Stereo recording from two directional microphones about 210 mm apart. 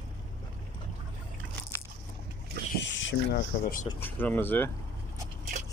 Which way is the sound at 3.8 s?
10° left (ahead or behind).